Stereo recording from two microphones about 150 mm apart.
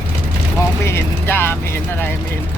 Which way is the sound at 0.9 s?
15° left (ahead or behind).